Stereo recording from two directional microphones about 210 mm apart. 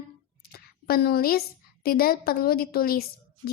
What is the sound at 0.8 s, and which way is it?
A woman's voice, 45° left (ahead or behind).